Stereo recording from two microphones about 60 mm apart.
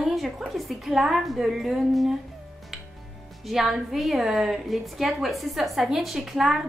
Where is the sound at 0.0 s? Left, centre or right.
Centre.